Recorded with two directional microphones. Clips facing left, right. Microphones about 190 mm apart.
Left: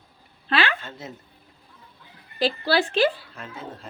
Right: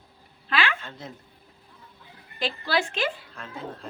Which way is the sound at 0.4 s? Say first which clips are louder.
Left 3 dB; 35° left (ahead or behind).